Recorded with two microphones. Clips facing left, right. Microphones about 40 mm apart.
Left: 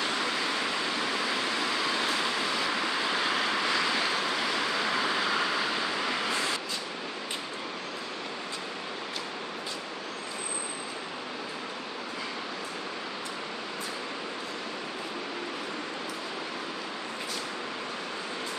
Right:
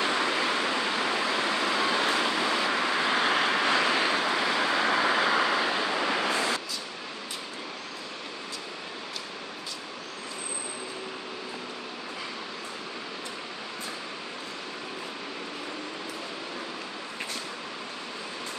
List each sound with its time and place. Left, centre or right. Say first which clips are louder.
0.0 s waterfall: right 3 dB; right